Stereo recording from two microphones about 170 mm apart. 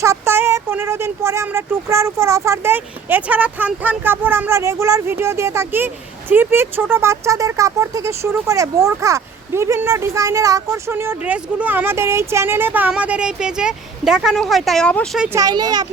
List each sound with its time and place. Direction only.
0.0 s speech: 15° right (ahead or behind); by 15.3 s centre (ahead or behind)
15.3 s speech: 20° right (ahead or behind)